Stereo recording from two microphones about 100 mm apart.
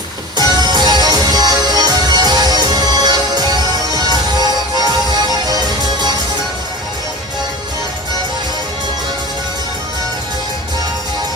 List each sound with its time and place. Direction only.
0.3 s music: 45° right (ahead or behind)